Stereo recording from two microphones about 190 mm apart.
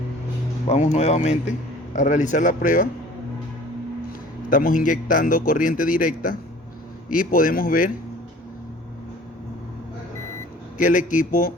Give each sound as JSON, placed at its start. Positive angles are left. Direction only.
{"t": 0.7, "sound": "a man's voice", "side_deg": 35}
{"t": 4.4, "sound": "a man's voice", "side_deg": 45}
{"t": 10.8, "sound": "a man's voice", "side_deg": 45}